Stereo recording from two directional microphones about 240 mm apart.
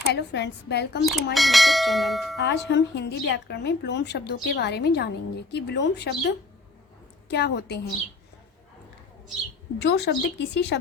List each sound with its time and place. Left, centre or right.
0.1 s speech: left
1.0 s bell: centre
2.4 s speech: left
9.8 s speech: left